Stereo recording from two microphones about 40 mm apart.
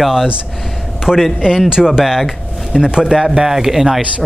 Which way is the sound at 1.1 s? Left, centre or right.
Right.